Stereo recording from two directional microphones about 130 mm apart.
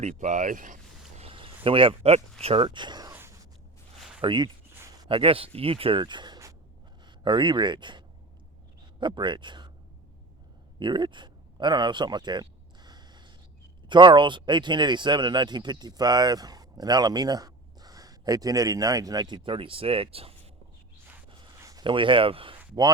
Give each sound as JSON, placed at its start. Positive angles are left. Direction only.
{"t": 0.0, "sound": "speech", "side_deg": -65}
{"t": 1.2, "sound": "a sound", "side_deg": -40}
{"t": 1.6, "sound": "speech", "side_deg": -45}
{"t": 2.6, "sound": "speech", "side_deg": -35}
{"t": 3.1, "sound": "a sound", "side_deg": -20}
{"t": 4.2, "sound": "speech", "side_deg": -40}
{"t": 10.8, "sound": "a sound", "side_deg": -35}
{"t": 13.8, "sound": "speech", "side_deg": -35}
{"t": 21.6, "sound": "speech", "side_deg": -30}